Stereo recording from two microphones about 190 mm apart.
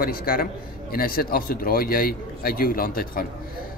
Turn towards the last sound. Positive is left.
turn(degrees=50)  # may be behind; listen again after turning